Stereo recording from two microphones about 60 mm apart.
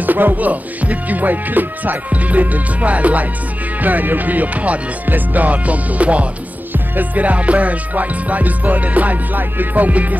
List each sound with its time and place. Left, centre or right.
0.0 s music: right